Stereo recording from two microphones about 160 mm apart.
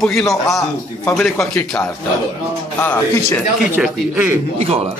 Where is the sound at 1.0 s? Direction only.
10° left (ahead or behind).